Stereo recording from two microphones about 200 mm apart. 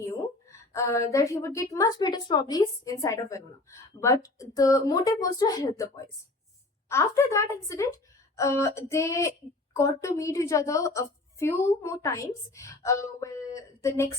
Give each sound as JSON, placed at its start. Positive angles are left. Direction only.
{"t": 0.0, "sound": "a woman's voice", "side_deg": 15}